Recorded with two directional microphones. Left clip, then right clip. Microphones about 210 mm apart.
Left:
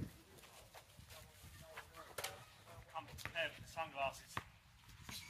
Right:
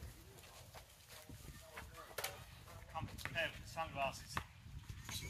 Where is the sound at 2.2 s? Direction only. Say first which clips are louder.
Right 2 dB; 15° right (ahead or behind).